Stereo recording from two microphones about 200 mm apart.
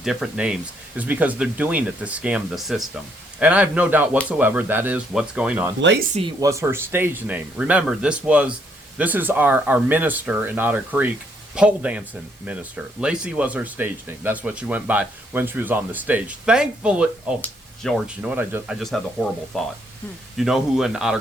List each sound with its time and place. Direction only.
0.0 s speech: centre (ahead or behind)
5.8 s speech: 60° right (ahead or behind)
6.4 s speech: 15° right (ahead or behind)